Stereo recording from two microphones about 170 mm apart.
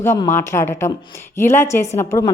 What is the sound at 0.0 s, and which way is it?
A woman's voice, 15° left (ahead or behind).